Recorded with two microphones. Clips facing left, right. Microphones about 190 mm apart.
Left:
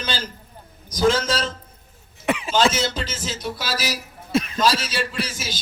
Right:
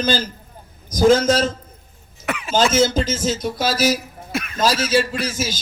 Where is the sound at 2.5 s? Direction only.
45° right (ahead or behind).